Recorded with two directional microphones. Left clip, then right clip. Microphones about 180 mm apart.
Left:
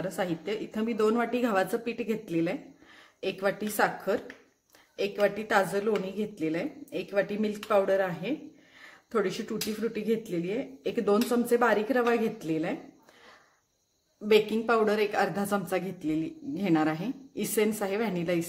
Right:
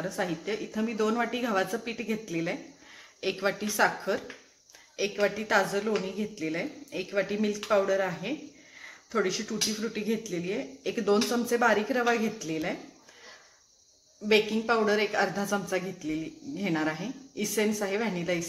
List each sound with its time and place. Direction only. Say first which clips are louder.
0.1 s speech: even; 40° left (ahead or behind)
14.2 s speech: left 1 dB; 50° left (ahead or behind)